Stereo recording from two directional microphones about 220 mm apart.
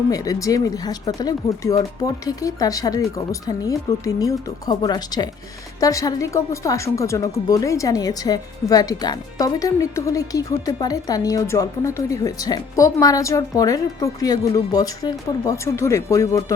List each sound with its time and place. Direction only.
0.1 s speech: 15° left (ahead or behind)